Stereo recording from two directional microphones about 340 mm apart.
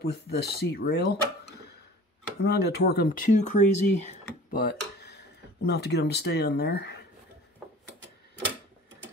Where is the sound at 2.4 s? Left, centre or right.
Left.